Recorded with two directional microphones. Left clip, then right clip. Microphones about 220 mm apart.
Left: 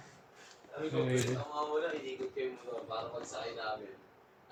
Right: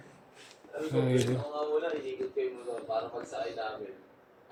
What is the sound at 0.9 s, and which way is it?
Speech, 20° right (ahead or behind).